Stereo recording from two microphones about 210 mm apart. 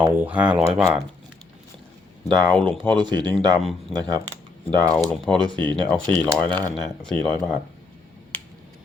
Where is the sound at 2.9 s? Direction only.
20° right (ahead or behind).